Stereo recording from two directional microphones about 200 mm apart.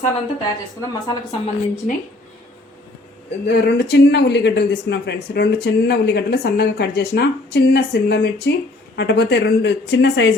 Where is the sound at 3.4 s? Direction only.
55° left (ahead or behind).